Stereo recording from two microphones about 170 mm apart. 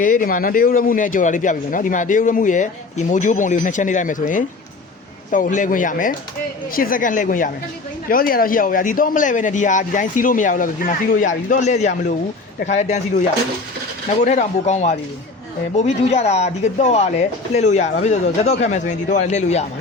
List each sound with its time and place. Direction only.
0.0 s a man's voice: 55° left (ahead or behind)
14.2 s a man's voice: 45° left (ahead or behind)